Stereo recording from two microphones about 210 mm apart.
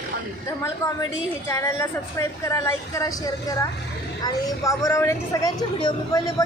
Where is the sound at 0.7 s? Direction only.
15° left (ahead or behind).